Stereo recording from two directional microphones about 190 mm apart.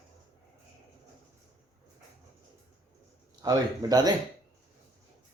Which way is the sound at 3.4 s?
20° right (ahead or behind).